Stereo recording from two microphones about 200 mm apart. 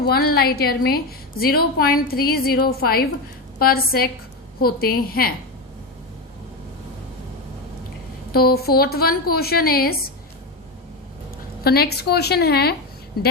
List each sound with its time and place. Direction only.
0.0 s a woman's voice: 50° left (ahead or behind)
8.3 s a woman's voice: 50° left (ahead or behind)
11.6 s a woman's voice: 50° left (ahead or behind)